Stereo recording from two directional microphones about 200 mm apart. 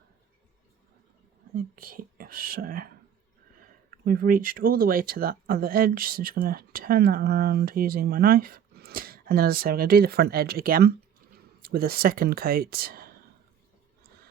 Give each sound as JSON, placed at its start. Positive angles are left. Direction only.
{"t": 1.5, "sound": "speech", "side_deg": -45}
{"t": 3.9, "sound": "speech", "side_deg": -45}